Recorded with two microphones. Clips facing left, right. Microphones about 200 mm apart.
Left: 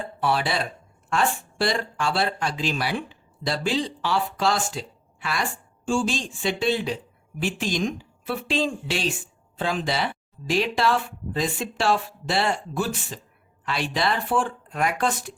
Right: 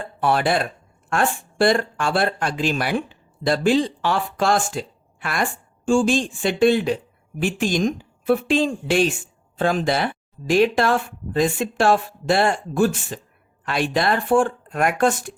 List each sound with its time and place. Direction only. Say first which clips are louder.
0.2 s speech: right 5 dB; 50° right (ahead or behind)